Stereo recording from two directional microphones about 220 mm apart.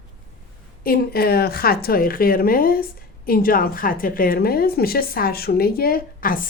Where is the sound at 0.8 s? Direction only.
45° left (ahead or behind).